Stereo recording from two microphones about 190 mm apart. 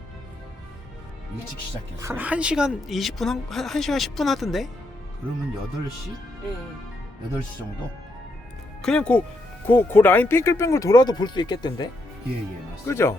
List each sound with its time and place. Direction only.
2.0 s a woman's voice: 10° right (ahead or behind)
8.8 s a woman's voice: 5° left (ahead or behind)